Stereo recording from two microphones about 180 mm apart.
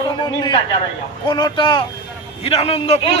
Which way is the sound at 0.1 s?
25° left (ahead or behind).